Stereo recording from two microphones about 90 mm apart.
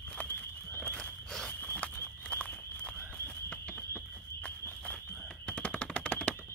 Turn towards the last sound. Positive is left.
turn(degrees=15)  # may be behind; listen again after turning